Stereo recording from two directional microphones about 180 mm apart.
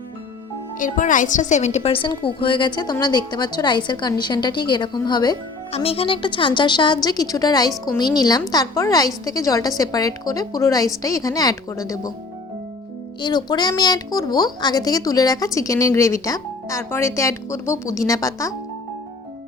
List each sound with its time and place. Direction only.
0.8 s a woman's voice: 45° left (ahead or behind); by 12.1 s 15° left (ahead or behind)
13.2 s a woman's voice: 20° left (ahead or behind)